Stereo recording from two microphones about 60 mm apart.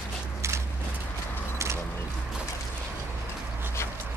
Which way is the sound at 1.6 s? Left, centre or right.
Right.